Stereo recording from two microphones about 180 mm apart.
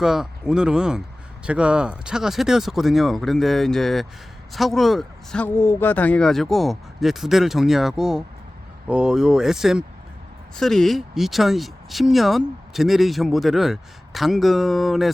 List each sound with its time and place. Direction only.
0.0 s speech: centre (ahead or behind)